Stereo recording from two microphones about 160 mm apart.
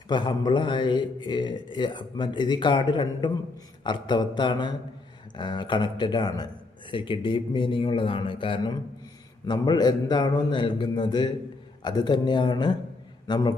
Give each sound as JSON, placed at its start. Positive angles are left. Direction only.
{"t": 0.1, "sound": "a man's voice", "side_deg": 30}